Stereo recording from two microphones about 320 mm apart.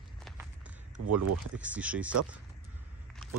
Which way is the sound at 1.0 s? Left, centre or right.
Right.